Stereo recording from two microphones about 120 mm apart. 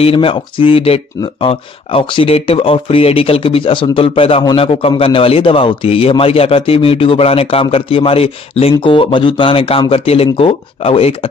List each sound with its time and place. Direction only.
0.0 s speech: 50° left (ahead or behind)